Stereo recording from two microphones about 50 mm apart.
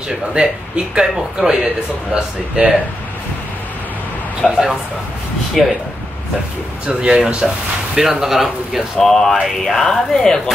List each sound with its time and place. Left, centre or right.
0.1 s speech: centre
4.4 s speech: centre
6.9 s speech: centre
9.0 s speech: centre